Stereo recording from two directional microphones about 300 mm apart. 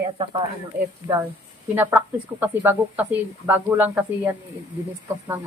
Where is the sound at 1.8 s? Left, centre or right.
Centre.